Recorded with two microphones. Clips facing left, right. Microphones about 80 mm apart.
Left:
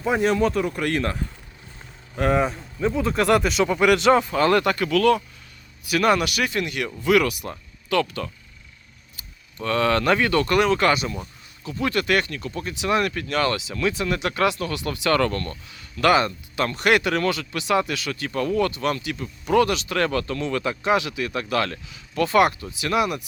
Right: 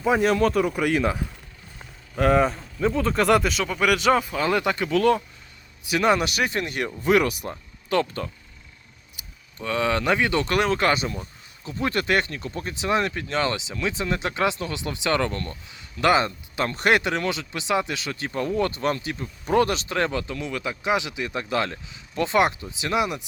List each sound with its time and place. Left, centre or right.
0.0 s a man's voice: centre
4.7 s speech: right
9.2 s keys jangling: centre
9.6 s speech: centre